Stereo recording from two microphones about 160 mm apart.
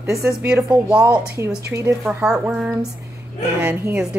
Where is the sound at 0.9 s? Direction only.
20° right (ahead or behind).